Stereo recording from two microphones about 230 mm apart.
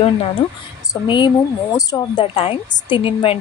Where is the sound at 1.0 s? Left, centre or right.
Centre.